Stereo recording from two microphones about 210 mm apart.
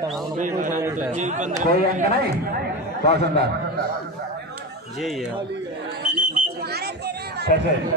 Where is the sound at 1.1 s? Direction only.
35° right (ahead or behind).